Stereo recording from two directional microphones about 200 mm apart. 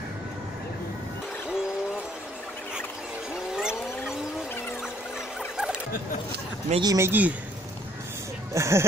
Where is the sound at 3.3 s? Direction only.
5° right (ahead or behind).